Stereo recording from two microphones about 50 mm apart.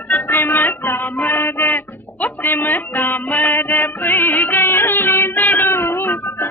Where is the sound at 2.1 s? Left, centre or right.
Left.